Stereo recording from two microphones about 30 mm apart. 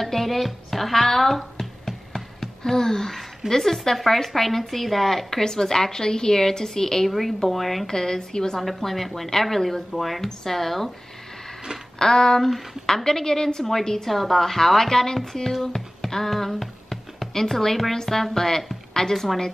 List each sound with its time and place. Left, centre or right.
0.0 s speech: centre
2.4 s a sound: centre
3.4 s a woman's voice: centre
5.4 s a woman's voice: centre
7.1 s a woman's voice: centre
7.9 s a woman's voice: left
8.5 s speech: centre
12.0 s a woman's voice: centre